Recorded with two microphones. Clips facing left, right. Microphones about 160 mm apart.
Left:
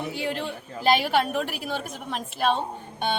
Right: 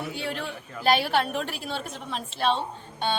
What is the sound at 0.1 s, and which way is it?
A woman's voice, 15° left (ahead or behind).